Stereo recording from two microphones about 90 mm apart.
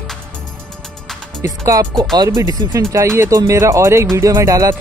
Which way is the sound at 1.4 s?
35° right (ahead or behind).